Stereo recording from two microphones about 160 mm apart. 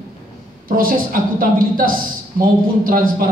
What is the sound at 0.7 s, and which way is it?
Speech, 60° right (ahead or behind).